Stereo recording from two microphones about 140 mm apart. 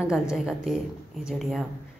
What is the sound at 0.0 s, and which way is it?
A woman's voice, 5° right (ahead or behind).